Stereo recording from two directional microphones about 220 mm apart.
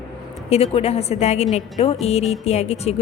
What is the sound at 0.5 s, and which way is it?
A woman's voice, 25° left (ahead or behind).